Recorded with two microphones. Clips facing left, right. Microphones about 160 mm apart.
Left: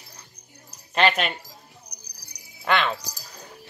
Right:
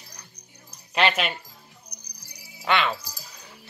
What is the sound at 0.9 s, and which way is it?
Speech, centre (ahead or behind).